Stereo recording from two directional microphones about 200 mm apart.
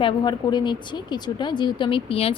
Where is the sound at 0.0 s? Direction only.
20° left (ahead or behind).